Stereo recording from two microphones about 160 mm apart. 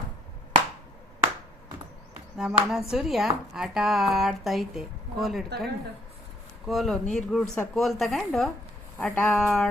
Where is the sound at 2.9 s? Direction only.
Centre (ahead or behind).